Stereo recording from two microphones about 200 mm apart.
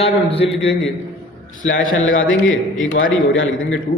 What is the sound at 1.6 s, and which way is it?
A man's voice, 75° left (ahead or behind).